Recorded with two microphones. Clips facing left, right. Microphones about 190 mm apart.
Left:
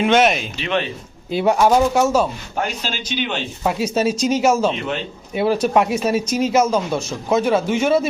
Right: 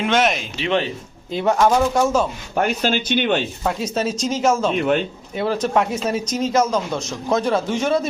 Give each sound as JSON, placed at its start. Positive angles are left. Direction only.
{"t": 0.0, "sound": "speech", "side_deg": 10}
{"t": 2.6, "sound": "speech", "side_deg": -55}
{"t": 3.6, "sound": "speech", "side_deg": 10}